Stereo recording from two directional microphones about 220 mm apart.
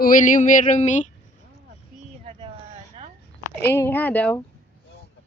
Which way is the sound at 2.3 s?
20° right (ahead or behind).